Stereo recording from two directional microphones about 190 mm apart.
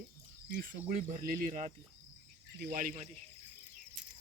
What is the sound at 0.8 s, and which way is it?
Speech, 40° right (ahead or behind).